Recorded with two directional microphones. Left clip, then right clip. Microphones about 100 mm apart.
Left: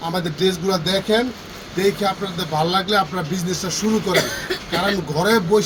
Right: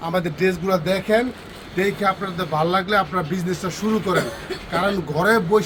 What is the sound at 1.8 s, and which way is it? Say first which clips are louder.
A man's voice: left 1 dB; 5° right (ahead or behind).